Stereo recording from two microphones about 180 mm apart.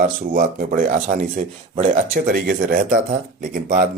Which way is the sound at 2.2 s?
55° right (ahead or behind).